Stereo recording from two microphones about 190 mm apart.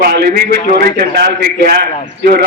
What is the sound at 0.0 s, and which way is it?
Speech, 55° right (ahead or behind).